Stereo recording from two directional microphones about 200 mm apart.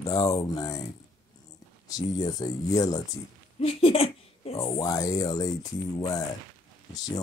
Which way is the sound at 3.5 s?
30° left (ahead or behind).